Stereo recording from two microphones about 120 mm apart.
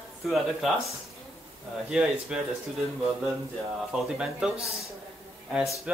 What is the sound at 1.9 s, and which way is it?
Speech, 5° right (ahead or behind).